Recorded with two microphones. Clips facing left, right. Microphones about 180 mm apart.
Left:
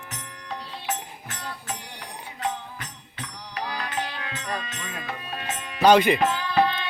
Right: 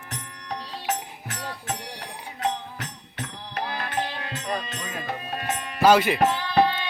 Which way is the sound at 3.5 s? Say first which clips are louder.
Right 1 dB; 55° right (ahead or behind).